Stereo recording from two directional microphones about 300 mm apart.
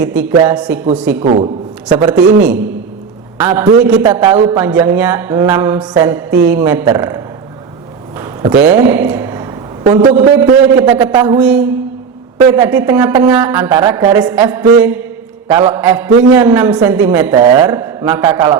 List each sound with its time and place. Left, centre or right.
0.0 s a woman's voice: centre
1.2 s a man's voice: right
2.0 s a woman's voice: centre
4.0 s mantra: centre
8.2 s a man's voice: centre
15.4 s a man's voice: centre
15.7 s a woman's voice: centre
17.3 s mantra: centre